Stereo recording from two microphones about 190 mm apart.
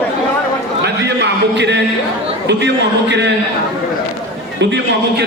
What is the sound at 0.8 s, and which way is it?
A man's voice, 65° right (ahead or behind).